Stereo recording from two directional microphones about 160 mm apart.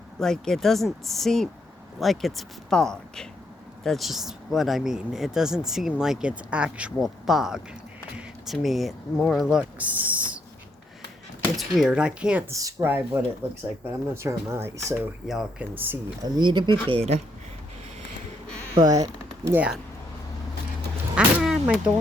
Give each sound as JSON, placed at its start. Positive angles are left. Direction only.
{"t": 0.2, "sound": "speech", "side_deg": 5}
{"t": 11.5, "sound": "speech", "side_deg": -5}
{"t": 15.3, "sound": "speech", "side_deg": -5}
{"t": 16.2, "sound": "speech", "side_deg": -30}
{"t": 16.9, "sound": "speech", "side_deg": -40}
{"t": 18.8, "sound": "speech", "side_deg": -25}
{"t": 19.5, "sound": "speech", "side_deg": -5}
{"t": 21.2, "sound": "a sound", "side_deg": -5}